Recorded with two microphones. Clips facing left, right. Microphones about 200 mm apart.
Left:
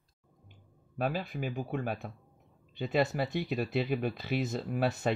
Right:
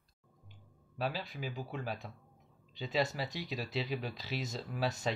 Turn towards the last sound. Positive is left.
turn(degrees=55)  # may be behind; listen again after turning